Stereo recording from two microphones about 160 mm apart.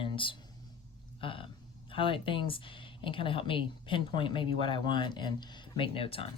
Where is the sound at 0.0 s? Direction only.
30° left (ahead or behind).